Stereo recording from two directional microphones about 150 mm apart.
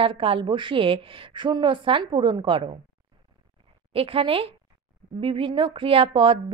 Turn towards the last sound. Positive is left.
turn(degrees=-35)  # may be behind; listen again after turning